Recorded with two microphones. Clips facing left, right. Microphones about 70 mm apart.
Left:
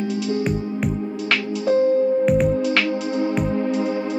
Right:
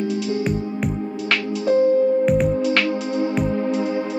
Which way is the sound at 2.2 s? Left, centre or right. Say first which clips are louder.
Even; centre.